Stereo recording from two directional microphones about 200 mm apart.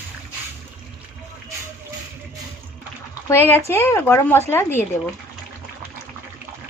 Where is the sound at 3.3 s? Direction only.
10° left (ahead or behind).